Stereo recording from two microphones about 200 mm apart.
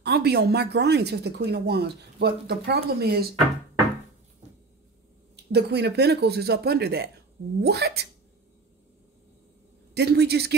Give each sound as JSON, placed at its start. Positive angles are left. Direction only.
{"t": 0.0, "sound": "speech", "side_deg": -55}
{"t": 5.3, "sound": "speech", "side_deg": -55}
{"t": 9.9, "sound": "speech", "side_deg": -55}